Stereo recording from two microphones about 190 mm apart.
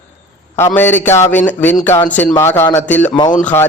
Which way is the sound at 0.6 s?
10° left (ahead or behind).